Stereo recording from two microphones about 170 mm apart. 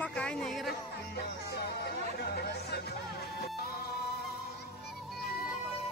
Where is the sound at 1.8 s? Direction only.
70° left (ahead or behind).